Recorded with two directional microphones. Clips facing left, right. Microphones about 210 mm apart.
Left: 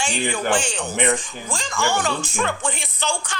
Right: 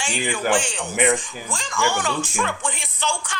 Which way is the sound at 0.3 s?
40° left (ahead or behind).